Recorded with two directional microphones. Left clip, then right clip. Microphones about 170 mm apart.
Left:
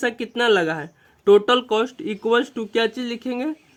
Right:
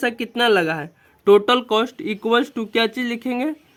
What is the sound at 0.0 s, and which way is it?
Speech, 30° right (ahead or behind).